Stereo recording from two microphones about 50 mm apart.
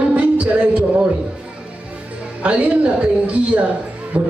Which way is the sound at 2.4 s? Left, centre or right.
Right.